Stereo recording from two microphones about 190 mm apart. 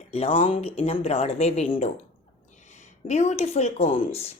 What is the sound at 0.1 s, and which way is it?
Speech, 30° left (ahead or behind).